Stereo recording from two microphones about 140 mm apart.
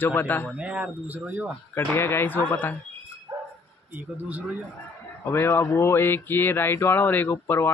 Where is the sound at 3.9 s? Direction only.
10° right (ahead or behind).